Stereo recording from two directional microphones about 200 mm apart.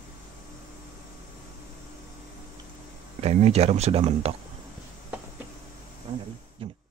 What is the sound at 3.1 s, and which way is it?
Speech, 30° right (ahead or behind).